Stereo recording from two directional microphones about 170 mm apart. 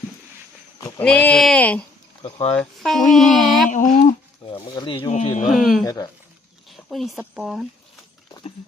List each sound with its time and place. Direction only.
0.9 s speech: 10° left (ahead or behind)
2.2 s speech: 35° left (ahead or behind)
2.6 s speech: 5° left (ahead or behind)
3.1 s a sound: centre (ahead or behind)
3.7 s a sound: 45° left (ahead or behind)
4.5 s speech: 25° left (ahead or behind); by 5.5 s 45° left (ahead or behind)
5.5 s speech: centre (ahead or behind)
5.8 s speech: 20° left (ahead or behind)
6.7 s a sound: centre (ahead or behind)
7.2 s speech: 5° right (ahead or behind)